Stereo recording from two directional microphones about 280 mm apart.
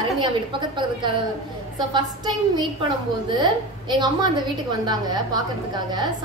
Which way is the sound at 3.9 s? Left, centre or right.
Centre.